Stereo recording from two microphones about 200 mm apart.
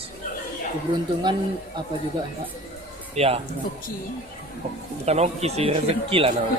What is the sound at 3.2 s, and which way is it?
Speech, 30° right (ahead or behind).